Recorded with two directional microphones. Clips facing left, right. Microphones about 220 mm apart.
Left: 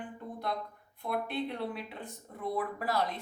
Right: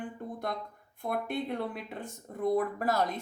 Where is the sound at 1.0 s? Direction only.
45° right (ahead or behind).